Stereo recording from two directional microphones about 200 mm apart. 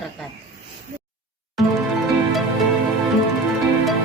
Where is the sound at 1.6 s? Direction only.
Centre (ahead or behind).